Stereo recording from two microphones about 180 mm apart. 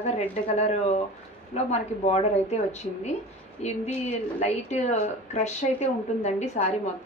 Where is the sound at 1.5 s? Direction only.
35° left (ahead or behind).